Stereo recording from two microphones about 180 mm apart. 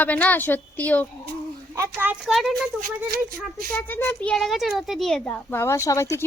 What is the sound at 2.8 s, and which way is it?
Speech, 50° right (ahead or behind).